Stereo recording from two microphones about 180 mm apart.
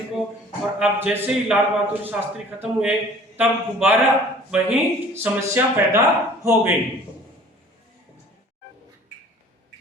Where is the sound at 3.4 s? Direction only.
10° right (ahead or behind).